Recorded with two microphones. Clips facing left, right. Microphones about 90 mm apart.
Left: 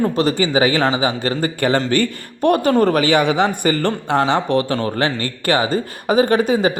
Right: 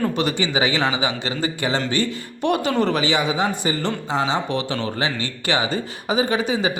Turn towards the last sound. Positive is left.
turn(degrees=45)  # may be behind; listen again after turning